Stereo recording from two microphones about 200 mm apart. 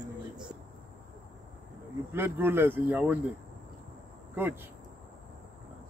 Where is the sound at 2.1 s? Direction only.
10° right (ahead or behind).